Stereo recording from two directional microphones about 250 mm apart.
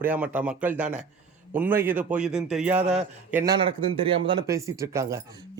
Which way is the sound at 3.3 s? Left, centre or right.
Centre.